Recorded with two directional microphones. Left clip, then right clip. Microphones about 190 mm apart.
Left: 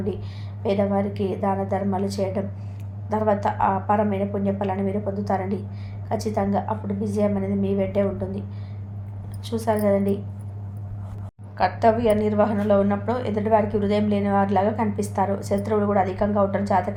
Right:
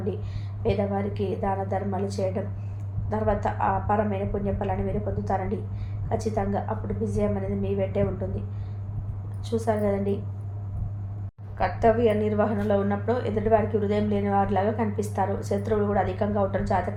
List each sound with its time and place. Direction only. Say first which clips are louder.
0.6 s a woman's voice: left 4 dB; 35° left (ahead or behind)
9.5 s a woman's voice: left 4 dB; 30° left (ahead or behind)
11.5 s a woman's voice: left 3 dB; 30° left (ahead or behind)